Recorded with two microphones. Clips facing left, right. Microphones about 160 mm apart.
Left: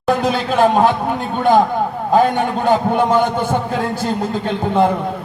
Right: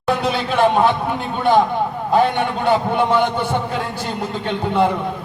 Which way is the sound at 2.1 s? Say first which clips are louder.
Left 2 dB; 45° left (ahead or behind).